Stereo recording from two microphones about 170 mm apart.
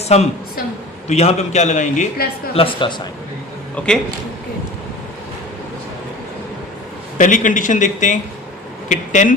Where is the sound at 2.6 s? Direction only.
35° left (ahead or behind).